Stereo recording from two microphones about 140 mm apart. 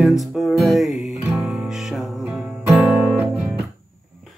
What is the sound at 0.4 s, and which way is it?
Music, centre (ahead or behind).